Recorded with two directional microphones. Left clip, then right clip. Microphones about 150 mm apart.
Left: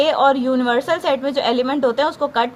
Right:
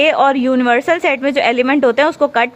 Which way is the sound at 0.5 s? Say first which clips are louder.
Right 5 dB; 90° right.